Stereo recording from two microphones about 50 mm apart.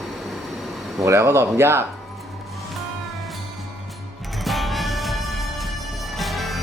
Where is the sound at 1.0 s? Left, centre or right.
Right.